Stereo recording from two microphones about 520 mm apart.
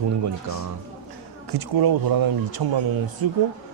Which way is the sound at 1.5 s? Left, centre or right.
Right.